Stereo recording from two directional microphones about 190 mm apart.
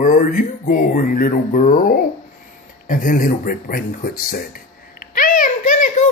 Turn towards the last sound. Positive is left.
turn(degrees=40)  # may be behind; listen again after turning